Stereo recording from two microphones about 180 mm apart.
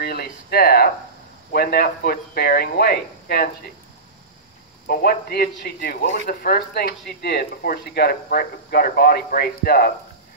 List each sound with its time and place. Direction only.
0.0 s speech: 60° left (ahead or behind)
4.8 s speech: 55° left (ahead or behind)